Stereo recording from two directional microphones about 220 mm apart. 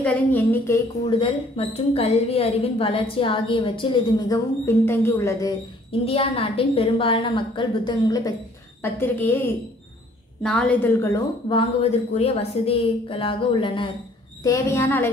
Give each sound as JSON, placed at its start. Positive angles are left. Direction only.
{"t": 0.0, "sound": "a woman's voice", "side_deg": 10}
{"t": 1.0, "sound": "a woman's voice", "side_deg": 25}
{"t": 5.9, "sound": "a woman's voice", "side_deg": 25}
{"t": 11.4, "sound": "a woman's voice", "side_deg": 25}
{"t": 14.4, "sound": "a woman's voice", "side_deg": 15}